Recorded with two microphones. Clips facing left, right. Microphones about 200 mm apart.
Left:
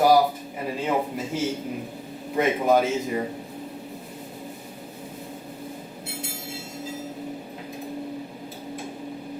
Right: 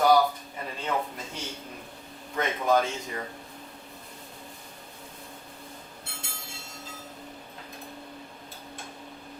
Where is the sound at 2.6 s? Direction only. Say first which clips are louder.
Left 1 dB; 5° left (ahead or behind).